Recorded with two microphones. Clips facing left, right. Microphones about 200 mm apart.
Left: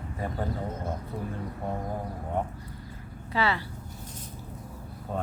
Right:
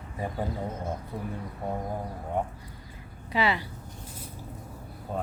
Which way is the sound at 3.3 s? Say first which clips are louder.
Right 1 dB; 15° right (ahead or behind).